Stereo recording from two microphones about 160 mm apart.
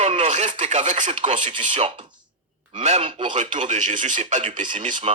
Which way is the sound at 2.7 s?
45° right (ahead or behind).